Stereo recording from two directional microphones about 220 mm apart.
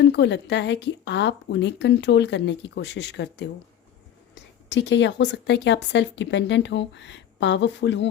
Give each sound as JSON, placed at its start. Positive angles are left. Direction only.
{"t": 0.0, "sound": "a woman's voice", "side_deg": 50}
{"t": 4.7, "sound": "a woman's voice", "side_deg": 55}